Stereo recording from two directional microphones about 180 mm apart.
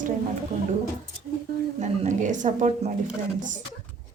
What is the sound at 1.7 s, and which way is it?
A woman's voice, 40° right (ahead or behind).